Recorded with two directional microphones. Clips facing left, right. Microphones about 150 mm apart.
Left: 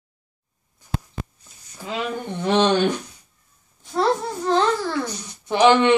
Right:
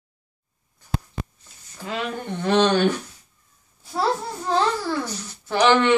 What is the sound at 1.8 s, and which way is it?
Speech, 10° left (ahead or behind).